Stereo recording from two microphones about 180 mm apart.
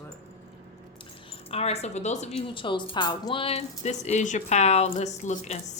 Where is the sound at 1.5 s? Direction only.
35° left (ahead or behind).